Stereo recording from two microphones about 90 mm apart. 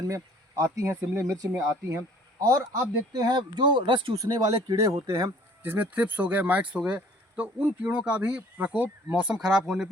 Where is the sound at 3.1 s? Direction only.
50° right (ahead or behind); by 4.1 s 65° right (ahead or behind).